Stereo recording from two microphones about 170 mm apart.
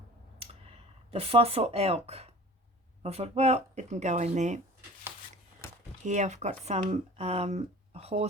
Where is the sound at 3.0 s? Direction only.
35° right (ahead or behind).